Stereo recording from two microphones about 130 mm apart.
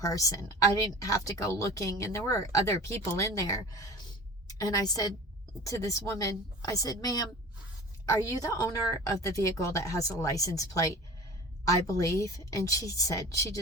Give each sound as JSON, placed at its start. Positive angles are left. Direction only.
{"t": 0.0, "sound": "speech", "side_deg": 25}
{"t": 8.4, "sound": "speech", "side_deg": 25}